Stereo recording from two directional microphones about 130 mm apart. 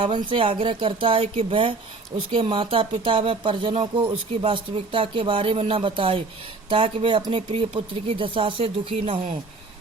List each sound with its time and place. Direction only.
0.0 s speech: 40° right (ahead or behind)